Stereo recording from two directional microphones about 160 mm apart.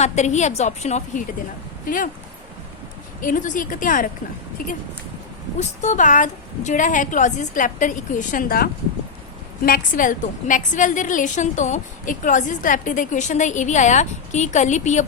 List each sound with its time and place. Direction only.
0.0 s a woman's voice: 45° left (ahead or behind)
3.2 s speech: 55° left (ahead or behind)
5.5 s a woman's voice: 45° left (ahead or behind)